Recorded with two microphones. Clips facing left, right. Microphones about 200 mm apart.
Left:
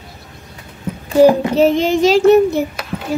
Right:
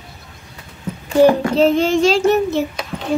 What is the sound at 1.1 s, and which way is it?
A child's voice, 10° left (ahead or behind).